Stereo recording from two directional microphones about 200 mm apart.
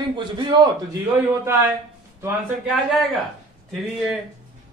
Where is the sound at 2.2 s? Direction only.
10° right (ahead or behind).